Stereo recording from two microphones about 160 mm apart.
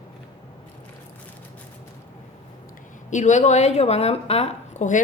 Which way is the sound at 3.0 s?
50° left (ahead or behind).